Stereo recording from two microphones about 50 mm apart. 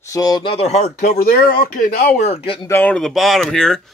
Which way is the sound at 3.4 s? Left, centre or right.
Centre.